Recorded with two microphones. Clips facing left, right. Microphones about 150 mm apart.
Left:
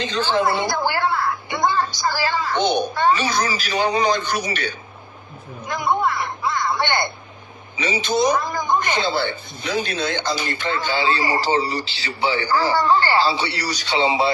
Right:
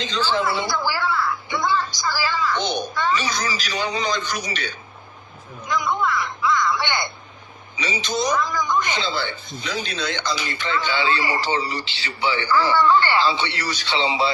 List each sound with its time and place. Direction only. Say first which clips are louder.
0.0 s a woman's voice: left 3 dB; 55° left (ahead or behind)
5.6 s a sound: left 2 dB; 55° left (ahead or behind)
8.0 s speech: left 3 dB; 55° left (ahead or behind)